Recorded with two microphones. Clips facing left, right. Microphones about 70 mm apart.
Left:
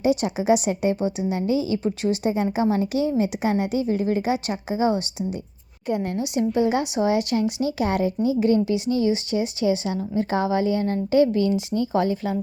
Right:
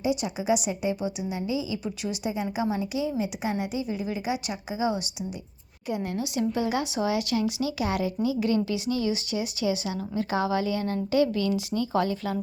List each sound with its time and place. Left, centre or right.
0.0 s a woman's voice: left
1.8 s speech: left
2.3 s a woman's voice: left
6.1 s speech: left